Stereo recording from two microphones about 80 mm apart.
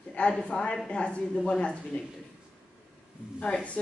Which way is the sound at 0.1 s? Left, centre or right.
Centre.